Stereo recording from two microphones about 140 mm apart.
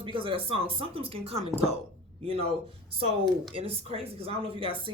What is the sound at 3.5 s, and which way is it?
Speech, 45° right (ahead or behind).